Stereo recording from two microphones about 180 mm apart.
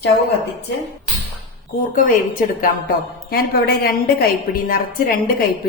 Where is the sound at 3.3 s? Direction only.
55° left (ahead or behind).